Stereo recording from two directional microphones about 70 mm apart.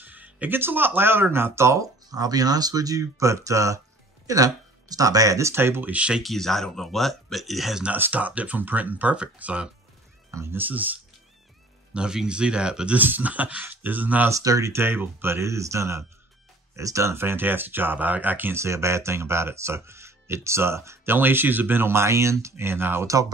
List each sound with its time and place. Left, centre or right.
0.0 s music: right
0.6 s speech: right
1.8 s speech: right
5.5 s speech: right
5.9 s speech: centre
6.2 s speech: centre
7.8 s speech: right
10.3 s speech: right
10.6 s speech: right
11.9 s speech: centre
14.3 s speech: right
14.7 s speech: right
18.6 s speech: right